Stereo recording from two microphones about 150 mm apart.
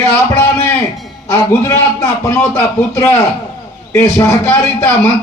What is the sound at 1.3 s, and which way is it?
A man's voice, 20° left (ahead or behind).